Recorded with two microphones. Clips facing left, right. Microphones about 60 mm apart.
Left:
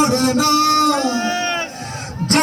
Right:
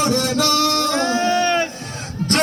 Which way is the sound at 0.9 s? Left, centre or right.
Right.